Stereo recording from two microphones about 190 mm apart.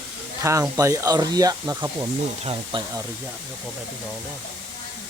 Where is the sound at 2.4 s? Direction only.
30° right (ahead or behind).